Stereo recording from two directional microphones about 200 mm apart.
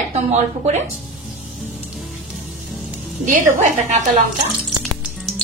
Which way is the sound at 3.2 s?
40° right (ahead or behind).